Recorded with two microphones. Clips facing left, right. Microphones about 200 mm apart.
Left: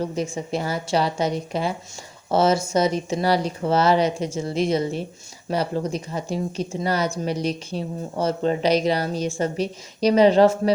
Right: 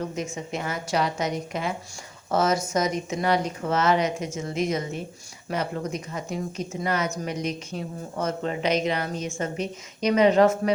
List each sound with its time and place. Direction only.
0.0 s speech: 30° left (ahead or behind)